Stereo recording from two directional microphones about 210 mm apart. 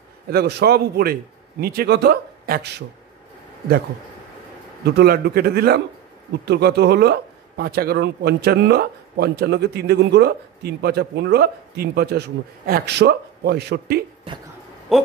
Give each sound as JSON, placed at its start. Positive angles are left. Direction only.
{"t": 0.3, "sound": "a man's voice", "side_deg": -50}
{"t": 4.8, "sound": "a man's voice", "side_deg": -50}
{"t": 14.9, "sound": "hoot", "side_deg": 0}